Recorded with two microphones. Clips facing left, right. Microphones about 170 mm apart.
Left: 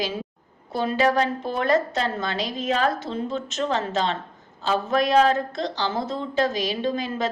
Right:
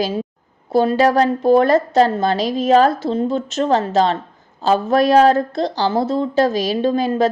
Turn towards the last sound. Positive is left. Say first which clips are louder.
# right 9 dB
turn(degrees=-35)  # may be behind; listen again after turning